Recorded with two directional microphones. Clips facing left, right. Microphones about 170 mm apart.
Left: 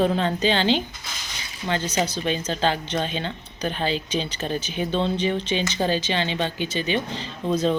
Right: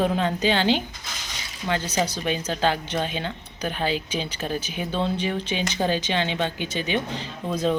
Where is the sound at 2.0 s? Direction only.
10° right (ahead or behind).